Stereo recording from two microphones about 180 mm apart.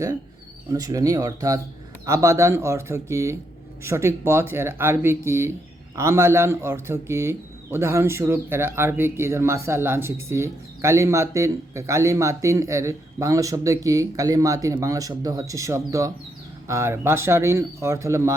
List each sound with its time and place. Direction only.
0.7 s speech: 20° right (ahead or behind)